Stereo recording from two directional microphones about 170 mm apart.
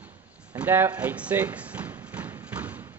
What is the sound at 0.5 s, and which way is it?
Thump, 10° right (ahead or behind).